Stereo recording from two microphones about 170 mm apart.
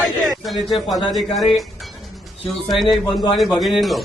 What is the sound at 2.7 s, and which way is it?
A man's voice, centre (ahead or behind).